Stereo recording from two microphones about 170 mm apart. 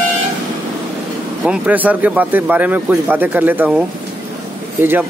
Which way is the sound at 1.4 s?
10° right (ahead or behind).